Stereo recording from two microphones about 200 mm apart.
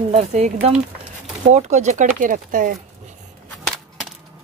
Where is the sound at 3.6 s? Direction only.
5° left (ahead or behind).